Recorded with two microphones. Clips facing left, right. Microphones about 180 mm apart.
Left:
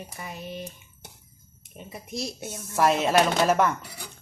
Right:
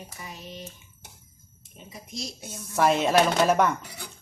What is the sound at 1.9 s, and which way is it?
Speech, 60° left (ahead or behind).